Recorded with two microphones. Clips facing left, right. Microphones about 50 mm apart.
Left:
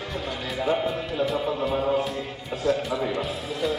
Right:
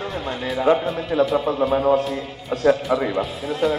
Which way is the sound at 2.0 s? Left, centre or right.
Centre.